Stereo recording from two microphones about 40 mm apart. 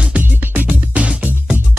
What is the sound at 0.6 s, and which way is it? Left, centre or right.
Music, right.